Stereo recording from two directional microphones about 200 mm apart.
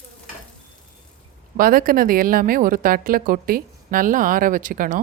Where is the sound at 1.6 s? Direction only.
45° right (ahead or behind).